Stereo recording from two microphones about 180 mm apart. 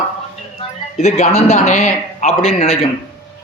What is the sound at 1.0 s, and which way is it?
A man's voice, 35° left (ahead or behind).